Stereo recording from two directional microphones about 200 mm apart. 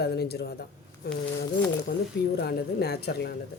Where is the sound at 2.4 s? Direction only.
55° left (ahead or behind).